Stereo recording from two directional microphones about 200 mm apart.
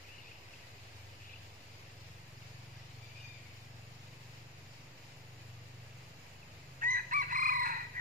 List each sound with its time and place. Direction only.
6.8 s chicken: 40° right (ahead or behind)